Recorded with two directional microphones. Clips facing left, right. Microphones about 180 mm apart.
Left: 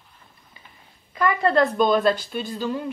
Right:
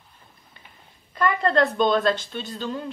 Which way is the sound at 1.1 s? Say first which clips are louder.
Left 1 dB; 5° left (ahead or behind).